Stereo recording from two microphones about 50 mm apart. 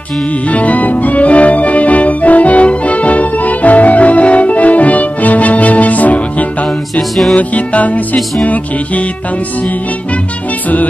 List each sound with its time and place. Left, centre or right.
0.5 s music: left
7.0 s music: centre
7.3 s music: left